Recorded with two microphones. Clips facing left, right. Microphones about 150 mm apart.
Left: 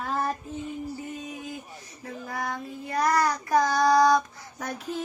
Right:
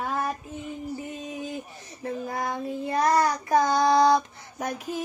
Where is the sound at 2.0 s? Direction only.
25° right (ahead or behind).